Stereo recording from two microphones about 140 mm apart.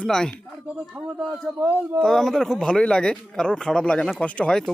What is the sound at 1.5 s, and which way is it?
Speech, 15° right (ahead or behind).